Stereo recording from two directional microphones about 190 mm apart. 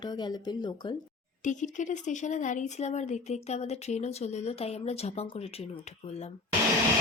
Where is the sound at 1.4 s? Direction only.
40° left (ahead or behind).